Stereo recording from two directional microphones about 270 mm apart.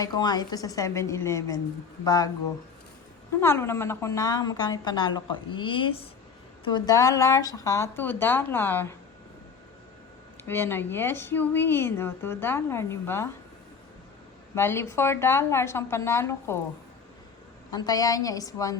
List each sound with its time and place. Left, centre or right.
0.0 s a woman's voice: centre
3.4 s a woman's voice: centre
10.4 s a woman's voice: centre
14.5 s a woman's voice: centre
17.7 s a woman's voice: centre